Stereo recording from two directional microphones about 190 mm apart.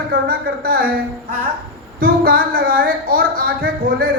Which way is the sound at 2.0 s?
50° right (ahead or behind).